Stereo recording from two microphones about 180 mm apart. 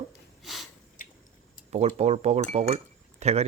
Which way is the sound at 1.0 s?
50° left (ahead or behind).